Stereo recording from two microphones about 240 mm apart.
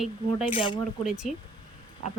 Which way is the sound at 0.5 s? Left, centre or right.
Left.